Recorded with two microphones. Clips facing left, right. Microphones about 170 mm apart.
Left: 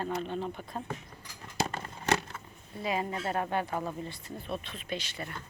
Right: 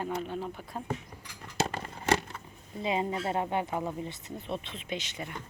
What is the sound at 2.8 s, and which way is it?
Speech, 25° right (ahead or behind).